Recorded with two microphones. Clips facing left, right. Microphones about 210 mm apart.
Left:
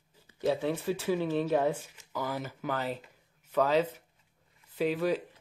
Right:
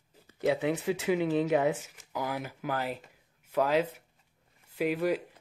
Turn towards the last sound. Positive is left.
turn(degrees=-10)  # may be behind; listen again after turning